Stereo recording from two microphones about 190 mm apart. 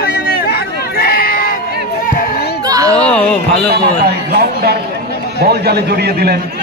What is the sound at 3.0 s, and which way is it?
Speech, 5° left (ahead or behind).